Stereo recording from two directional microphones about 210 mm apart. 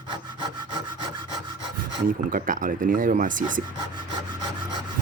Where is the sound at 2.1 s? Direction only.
40° right (ahead or behind).